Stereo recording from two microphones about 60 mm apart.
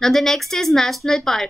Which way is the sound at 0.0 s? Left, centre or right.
Centre.